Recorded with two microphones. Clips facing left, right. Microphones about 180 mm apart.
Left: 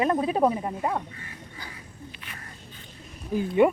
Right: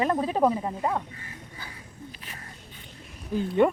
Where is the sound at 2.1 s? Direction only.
35° right (ahead or behind).